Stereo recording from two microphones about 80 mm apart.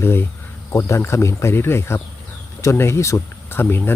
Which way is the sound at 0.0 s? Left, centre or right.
Left.